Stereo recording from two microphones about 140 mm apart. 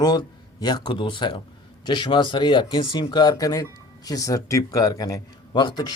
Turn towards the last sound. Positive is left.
turn(degrees=30)  # may be behind; listen again after turning